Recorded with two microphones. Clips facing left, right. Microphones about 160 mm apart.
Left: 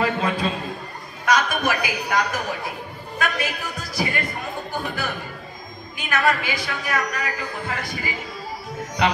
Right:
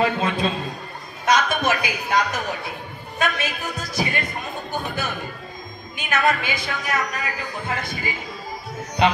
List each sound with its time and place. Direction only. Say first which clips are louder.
0.0 s a sound: right 1 dB; 20° right (ahead or behind)
3.2 s a man's voice: right 1 dB; 20° right (ahead or behind)
5.9 s a woman's voice: even; 20° right (ahead or behind)